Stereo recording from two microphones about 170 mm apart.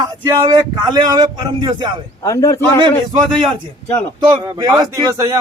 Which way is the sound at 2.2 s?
20° left (ahead or behind).